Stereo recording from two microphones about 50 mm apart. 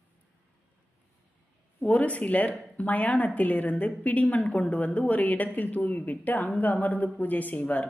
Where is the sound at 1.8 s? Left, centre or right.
Left.